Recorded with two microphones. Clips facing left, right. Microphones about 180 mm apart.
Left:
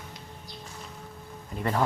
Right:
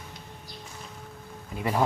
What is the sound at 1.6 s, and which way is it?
Speech, 10° right (ahead or behind).